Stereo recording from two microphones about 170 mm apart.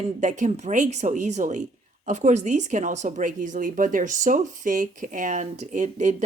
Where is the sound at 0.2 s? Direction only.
45° right (ahead or behind).